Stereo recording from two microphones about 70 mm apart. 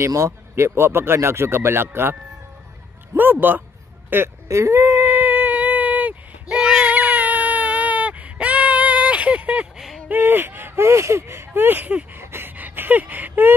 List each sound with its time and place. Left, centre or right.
0.0 s speech: right
3.2 s speech: right
4.5 s a sound: right
6.5 s baby cry: centre
9.8 s a sound: centre
10.0 s speech: right
12.2 s gasp: right